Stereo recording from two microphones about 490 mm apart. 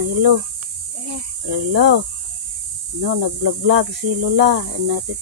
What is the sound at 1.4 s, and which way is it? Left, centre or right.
Speech, right.